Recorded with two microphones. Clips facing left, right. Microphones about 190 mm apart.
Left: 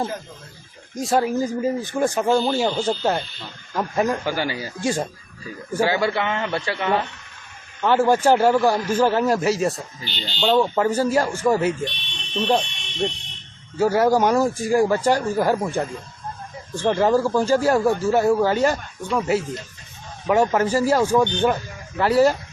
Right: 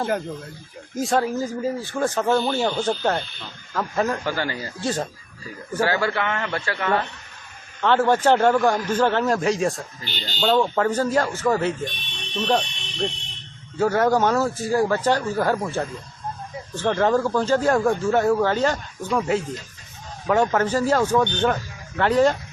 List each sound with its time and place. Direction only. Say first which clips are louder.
1.1 s speech: left 3 dB; 15° left (ahead or behind)
10.0 s speech: left 1 dB; 45° right (ahead or behind)
10.5 s speech: left 1 dB; 10° left (ahead or behind)
13.7 s speech: left 2 dB; 10° left (ahead or behind)